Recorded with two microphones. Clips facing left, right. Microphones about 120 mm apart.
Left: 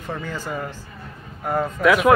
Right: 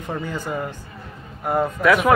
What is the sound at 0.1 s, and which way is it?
Speech, 15° right (ahead or behind).